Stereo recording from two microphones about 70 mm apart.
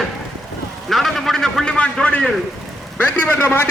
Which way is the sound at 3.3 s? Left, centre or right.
Left.